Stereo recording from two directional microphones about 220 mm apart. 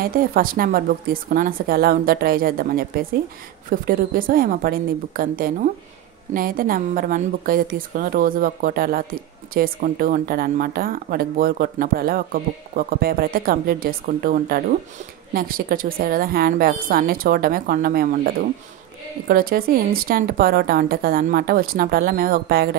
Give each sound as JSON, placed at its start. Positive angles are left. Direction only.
{"t": 0.0, "sound": "a woman's voice", "side_deg": -40}